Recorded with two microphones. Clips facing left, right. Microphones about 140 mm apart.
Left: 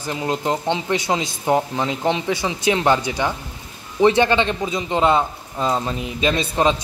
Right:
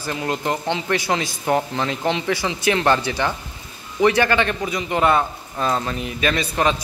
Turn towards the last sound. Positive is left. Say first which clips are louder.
# left 2 dB
turn(degrees=20)  # may be behind; listen again after turning